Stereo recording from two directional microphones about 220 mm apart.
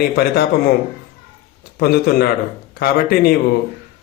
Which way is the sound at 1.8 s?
45° left (ahead or behind).